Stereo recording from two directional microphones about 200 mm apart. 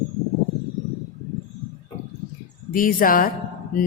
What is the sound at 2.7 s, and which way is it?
Speech, 45° left (ahead or behind).